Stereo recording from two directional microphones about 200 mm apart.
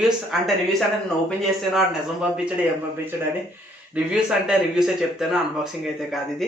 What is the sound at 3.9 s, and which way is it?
Speech, 5° right (ahead or behind).